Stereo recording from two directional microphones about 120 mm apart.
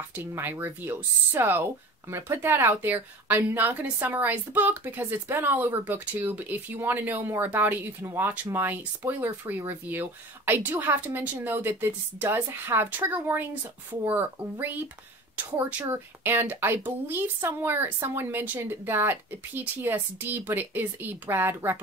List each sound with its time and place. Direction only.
0.1 s speech: 15° right (ahead or behind)